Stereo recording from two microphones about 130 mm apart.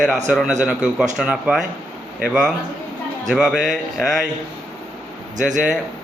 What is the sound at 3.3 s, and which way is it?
Speech, centre (ahead or behind).